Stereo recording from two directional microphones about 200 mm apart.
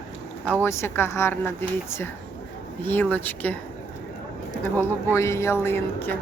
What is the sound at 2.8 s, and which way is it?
Speech, 10° left (ahead or behind).